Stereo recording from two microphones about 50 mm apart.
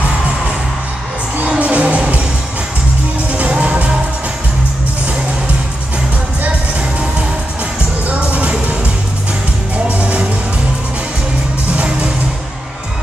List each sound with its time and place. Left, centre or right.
1.6 s music: right
3.3 s music: right
8.1 s music: right
9.8 s music: right
11.7 s music: right